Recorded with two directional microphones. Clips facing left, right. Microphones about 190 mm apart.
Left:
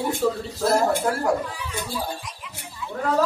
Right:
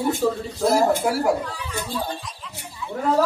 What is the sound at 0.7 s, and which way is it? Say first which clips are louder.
Speech: right 2 dB; 5° right (ahead or behind).